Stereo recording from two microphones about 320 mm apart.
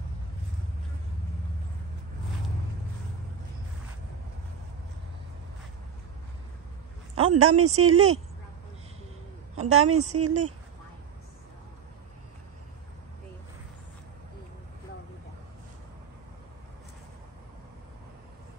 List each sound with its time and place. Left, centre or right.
7.2 s a woman's voice: right
9.6 s a woman's voice: right